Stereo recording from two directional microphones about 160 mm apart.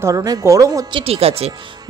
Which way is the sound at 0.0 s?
20° right (ahead or behind).